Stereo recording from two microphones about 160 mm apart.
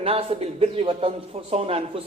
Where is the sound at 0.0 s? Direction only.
35° right (ahead or behind).